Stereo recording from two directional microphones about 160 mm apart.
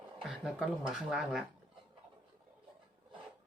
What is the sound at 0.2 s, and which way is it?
Speech, 5° right (ahead or behind).